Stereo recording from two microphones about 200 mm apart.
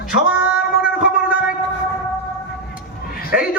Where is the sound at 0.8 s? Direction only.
5° right (ahead or behind).